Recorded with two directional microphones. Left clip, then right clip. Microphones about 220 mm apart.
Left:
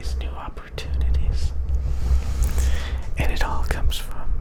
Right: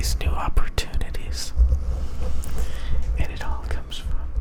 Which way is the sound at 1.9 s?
15° left (ahead or behind).